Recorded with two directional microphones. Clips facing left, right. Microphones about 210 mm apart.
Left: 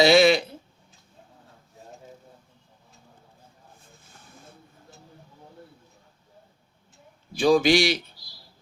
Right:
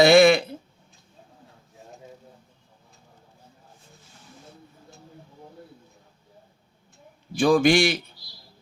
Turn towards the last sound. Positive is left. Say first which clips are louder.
# right 1 dB
turn(degrees=-50)  # may be behind; listen again after turning